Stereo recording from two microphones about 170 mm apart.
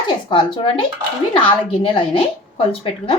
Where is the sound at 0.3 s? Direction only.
30° left (ahead or behind).